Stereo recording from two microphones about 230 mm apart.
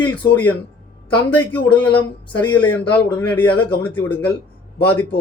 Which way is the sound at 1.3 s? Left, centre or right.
Centre.